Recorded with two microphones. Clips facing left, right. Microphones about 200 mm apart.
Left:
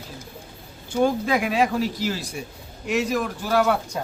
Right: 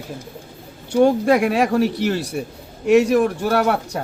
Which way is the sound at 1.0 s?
65° right (ahead or behind).